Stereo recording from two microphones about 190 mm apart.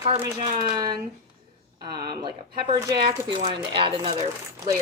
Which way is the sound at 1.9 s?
25° right (ahead or behind).